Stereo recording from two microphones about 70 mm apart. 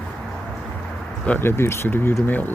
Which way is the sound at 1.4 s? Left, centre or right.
Left.